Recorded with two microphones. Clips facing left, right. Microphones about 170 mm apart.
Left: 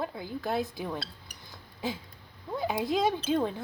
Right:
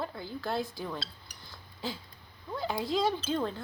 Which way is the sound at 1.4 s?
20° left (ahead or behind).